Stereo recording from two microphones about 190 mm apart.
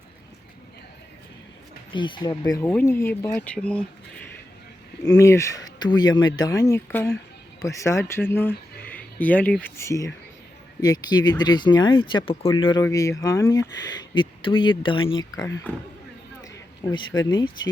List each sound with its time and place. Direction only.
1.9 s speech: 25° left (ahead or behind); by 3.8 s 5° left (ahead or behind)
5.2 s speech: 15° left (ahead or behind)